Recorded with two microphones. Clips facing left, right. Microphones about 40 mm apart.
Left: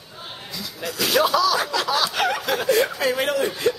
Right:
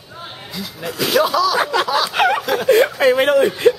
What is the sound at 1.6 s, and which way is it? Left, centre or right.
Speech, right.